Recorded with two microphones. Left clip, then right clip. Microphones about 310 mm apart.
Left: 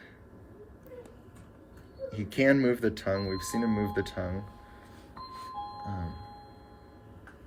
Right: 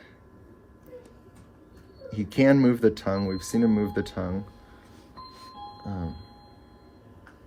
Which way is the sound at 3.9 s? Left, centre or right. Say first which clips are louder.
Right 2 dB; centre.